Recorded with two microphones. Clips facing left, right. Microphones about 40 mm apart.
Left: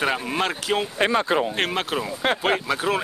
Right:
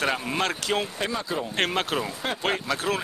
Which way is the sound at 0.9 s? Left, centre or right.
Left.